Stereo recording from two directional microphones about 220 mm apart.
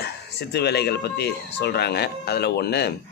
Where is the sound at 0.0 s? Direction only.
50° left (ahead or behind).